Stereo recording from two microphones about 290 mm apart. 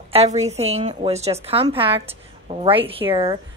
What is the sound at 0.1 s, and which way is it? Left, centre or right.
A woman's voice, right.